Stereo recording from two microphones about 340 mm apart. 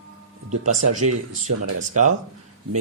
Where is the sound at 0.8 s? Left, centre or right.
Right.